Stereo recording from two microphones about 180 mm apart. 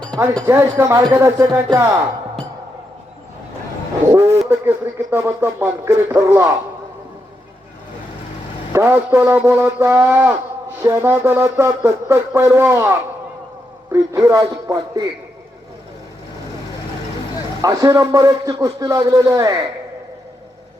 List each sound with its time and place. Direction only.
0.4 s speech: 15° right (ahead or behind)
4.1 s a sound: 15° right (ahead or behind)
5.1 s speech: 15° right (ahead or behind)
8.7 s a man's voice: 10° right (ahead or behind)
17.6 s a man's voice: 20° right (ahead or behind)